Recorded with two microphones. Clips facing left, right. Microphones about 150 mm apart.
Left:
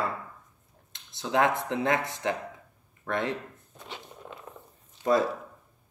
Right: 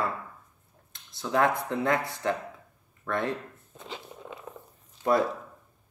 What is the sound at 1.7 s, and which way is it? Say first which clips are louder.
Speech: even; 20° left (ahead or behind).